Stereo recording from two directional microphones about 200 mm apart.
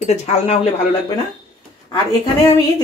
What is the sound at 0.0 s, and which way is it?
Speech, 35° left (ahead or behind).